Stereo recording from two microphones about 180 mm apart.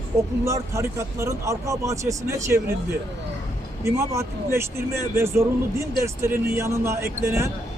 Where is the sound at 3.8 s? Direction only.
15° right (ahead or behind).